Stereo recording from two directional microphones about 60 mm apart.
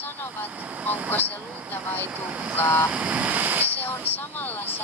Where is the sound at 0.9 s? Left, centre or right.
Left.